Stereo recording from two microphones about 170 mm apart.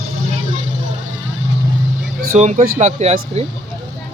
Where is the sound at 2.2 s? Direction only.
50° right (ahead or behind).